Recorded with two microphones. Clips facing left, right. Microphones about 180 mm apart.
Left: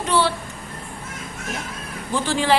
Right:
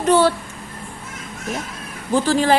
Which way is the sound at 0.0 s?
45° right (ahead or behind).